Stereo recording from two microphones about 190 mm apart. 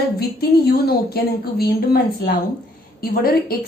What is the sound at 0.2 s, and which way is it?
A woman's voice, 55° left (ahead or behind).